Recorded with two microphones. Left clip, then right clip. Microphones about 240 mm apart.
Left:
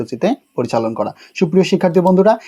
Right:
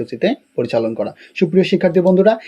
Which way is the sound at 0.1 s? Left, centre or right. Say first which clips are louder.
Even; centre.